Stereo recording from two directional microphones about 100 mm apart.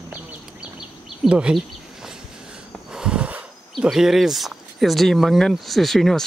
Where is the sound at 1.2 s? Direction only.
10° right (ahead or behind).